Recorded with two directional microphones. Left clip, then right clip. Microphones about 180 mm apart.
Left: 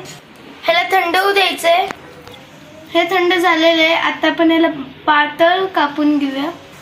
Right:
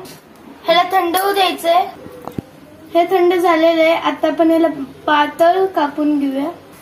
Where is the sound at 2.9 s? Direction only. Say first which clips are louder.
Right 1 dB; 20° left (ahead or behind).